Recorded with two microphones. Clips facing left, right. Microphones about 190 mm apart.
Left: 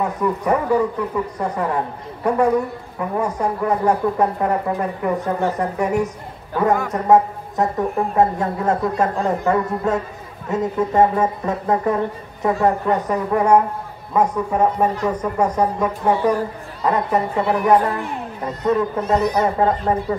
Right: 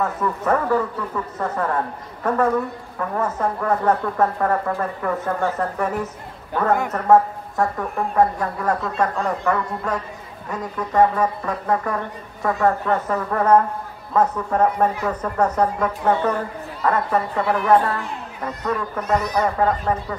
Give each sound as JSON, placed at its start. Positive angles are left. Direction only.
{"t": 0.0, "sound": "a woman's voice", "side_deg": 15}